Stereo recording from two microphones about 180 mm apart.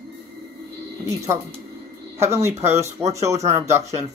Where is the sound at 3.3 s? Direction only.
40° right (ahead or behind).